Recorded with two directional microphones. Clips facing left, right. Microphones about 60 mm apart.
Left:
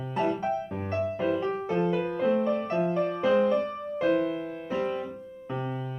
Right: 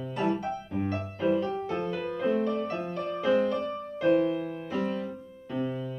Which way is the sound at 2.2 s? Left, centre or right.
Left.